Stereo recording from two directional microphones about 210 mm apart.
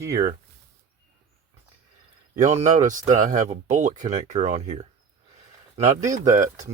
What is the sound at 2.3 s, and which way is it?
Speech, 35° right (ahead or behind).